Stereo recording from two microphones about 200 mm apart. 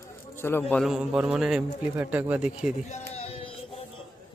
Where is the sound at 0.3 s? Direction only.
10° left (ahead or behind).